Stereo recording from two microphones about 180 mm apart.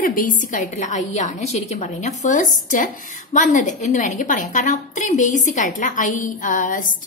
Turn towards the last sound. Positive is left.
turn(degrees=45)  # may be behind; listen again after turning